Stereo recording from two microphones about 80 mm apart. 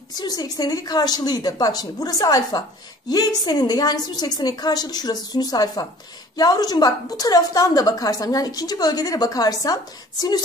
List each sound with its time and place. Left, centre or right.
0.2 s a woman's voice: left